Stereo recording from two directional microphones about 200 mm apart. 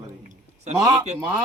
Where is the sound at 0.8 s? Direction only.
20° right (ahead or behind).